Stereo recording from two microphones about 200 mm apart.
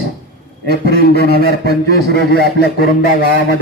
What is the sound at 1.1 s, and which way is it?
Speech, 50° left (ahead or behind).